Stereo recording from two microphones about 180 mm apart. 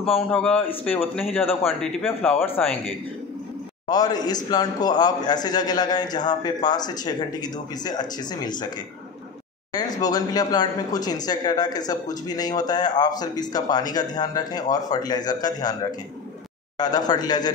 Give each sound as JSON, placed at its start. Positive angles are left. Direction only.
{"t": 0.3, "sound": "a man's voice", "side_deg": 10}
{"t": 2.4, "sound": "a man's voice", "side_deg": 10}
{"t": 3.9, "sound": "speech", "side_deg": 20}